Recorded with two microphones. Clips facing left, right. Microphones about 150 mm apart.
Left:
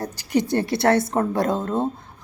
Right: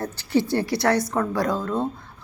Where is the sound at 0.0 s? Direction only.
15° left (ahead or behind).